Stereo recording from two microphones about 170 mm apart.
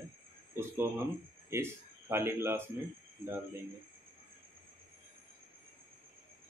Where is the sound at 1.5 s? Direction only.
15° right (ahead or behind).